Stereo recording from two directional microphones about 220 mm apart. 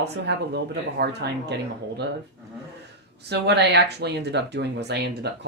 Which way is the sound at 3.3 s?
50° right (ahead or behind).